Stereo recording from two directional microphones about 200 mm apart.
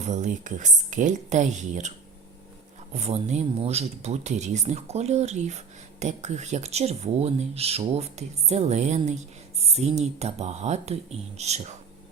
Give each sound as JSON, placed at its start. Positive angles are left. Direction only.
{"t": 0.0, "sound": "speech", "side_deg": -35}
{"t": 2.9, "sound": "speech", "side_deg": -35}